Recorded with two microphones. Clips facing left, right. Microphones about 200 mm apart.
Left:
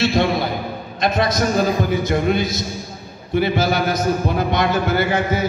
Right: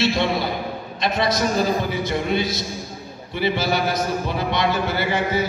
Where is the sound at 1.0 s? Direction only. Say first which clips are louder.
Left 3 dB; 50° left (ahead or behind).